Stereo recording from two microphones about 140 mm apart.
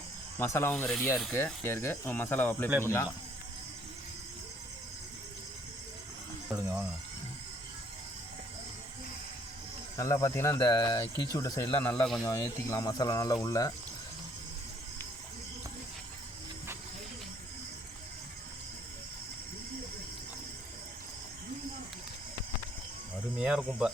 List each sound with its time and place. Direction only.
0.3 s speech: 20° left (ahead or behind)
6.5 s water: 25° right (ahead or behind)
10.0 s speech: 20° left (ahead or behind)
11.7 s speech: 10° left (ahead or behind)
12.2 s speech: 20° left (ahead or behind)
23.4 s a sound: 5° right (ahead or behind)